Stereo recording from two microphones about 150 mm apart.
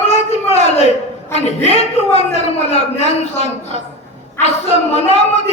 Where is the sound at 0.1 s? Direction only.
45° left (ahead or behind).